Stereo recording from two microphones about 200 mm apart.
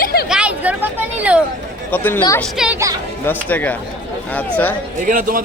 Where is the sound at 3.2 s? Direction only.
10° left (ahead or behind).